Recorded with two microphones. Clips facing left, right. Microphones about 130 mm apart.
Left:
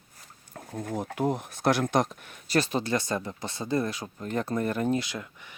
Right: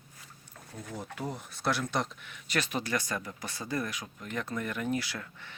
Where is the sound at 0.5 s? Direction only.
55° left (ahead or behind); by 5.0 s 35° left (ahead or behind).